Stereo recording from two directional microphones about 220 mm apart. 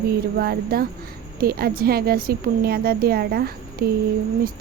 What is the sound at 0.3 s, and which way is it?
Speech, 45° right (ahead or behind).